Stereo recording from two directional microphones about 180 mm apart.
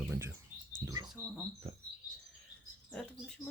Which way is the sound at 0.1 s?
15° right (ahead or behind).